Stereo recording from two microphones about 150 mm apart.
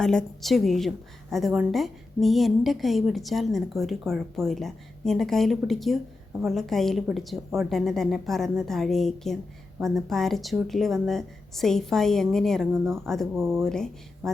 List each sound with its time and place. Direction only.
0.0 s a woman's voice: 5° left (ahead or behind)
12.8 s speech: 15° right (ahead or behind)
13.1 s a woman's voice: centre (ahead or behind)